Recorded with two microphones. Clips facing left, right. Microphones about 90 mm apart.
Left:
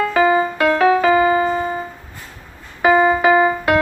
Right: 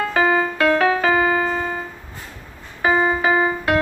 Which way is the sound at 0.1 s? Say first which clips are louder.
Left 2 dB; 25° left (ahead or behind).